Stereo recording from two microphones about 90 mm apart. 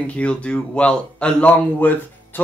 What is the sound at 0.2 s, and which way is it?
Speech, 15° left (ahead or behind).